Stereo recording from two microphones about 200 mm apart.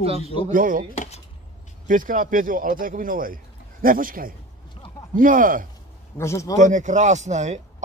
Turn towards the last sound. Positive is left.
turn(degrees=-35)  # may be behind; listen again after turning